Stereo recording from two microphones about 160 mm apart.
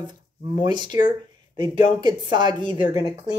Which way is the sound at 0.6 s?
25° right (ahead or behind).